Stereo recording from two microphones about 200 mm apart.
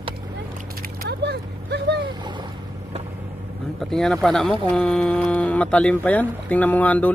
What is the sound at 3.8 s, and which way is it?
Speech, centre (ahead or behind).